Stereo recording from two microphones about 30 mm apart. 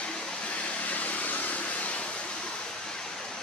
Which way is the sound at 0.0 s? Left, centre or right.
Left.